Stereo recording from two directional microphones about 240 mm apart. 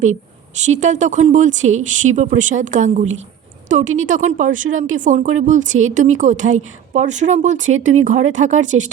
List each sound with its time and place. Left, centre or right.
0.6 s a woman's voice: right